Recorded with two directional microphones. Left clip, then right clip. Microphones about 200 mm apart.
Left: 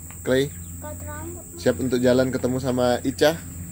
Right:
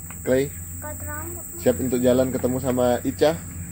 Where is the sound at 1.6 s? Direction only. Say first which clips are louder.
Even; 15° left (ahead or behind).